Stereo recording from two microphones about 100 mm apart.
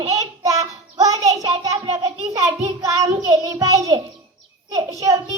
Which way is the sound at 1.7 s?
75° right (ahead or behind).